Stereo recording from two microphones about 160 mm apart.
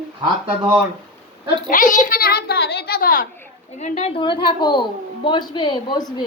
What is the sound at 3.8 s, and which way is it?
A woman's voice, 45° left (ahead or behind).